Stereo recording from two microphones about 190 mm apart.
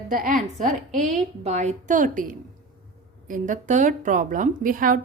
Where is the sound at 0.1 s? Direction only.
45° right (ahead or behind).